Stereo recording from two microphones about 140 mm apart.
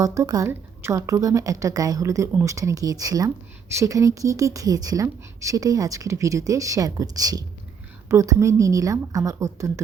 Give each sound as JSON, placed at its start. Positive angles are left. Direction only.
{"t": 0.0, "sound": "a woman's voice", "side_deg": -25}